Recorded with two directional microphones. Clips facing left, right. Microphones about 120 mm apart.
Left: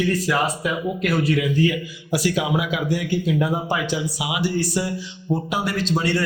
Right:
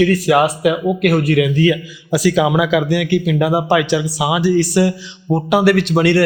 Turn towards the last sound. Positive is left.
turn(degrees=-70)  # may be behind; listen again after turning